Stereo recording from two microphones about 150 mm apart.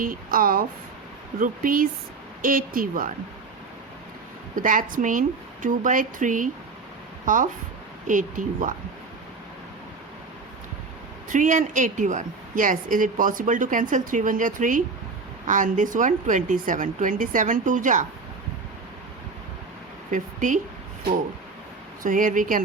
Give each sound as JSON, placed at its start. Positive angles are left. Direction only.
{"t": 0.0, "sound": "speech", "side_deg": -70}
{"t": 4.5, "sound": "a woman's voice", "side_deg": -60}
{"t": 11.3, "sound": "a woman's voice", "side_deg": -60}
{"t": 20.1, "sound": "speech", "side_deg": -60}
{"t": 22.0, "sound": "a woman's voice", "side_deg": -65}